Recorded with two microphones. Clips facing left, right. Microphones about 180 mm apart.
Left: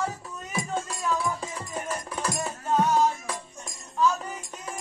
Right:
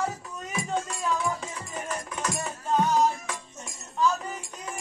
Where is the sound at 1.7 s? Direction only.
35° left (ahead or behind).